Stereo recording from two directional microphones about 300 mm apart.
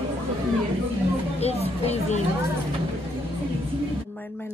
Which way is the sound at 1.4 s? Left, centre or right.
Left.